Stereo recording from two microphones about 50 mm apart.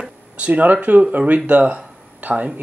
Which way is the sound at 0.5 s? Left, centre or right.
Right.